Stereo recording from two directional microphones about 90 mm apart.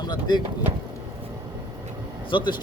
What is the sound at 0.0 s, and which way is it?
Speech, 55° left (ahead or behind).